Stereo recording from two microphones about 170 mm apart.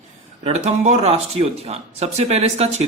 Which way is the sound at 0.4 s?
40° right (ahead or behind).